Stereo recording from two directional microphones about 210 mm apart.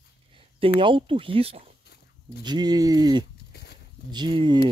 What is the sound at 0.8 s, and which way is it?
Speech, 25° right (ahead or behind).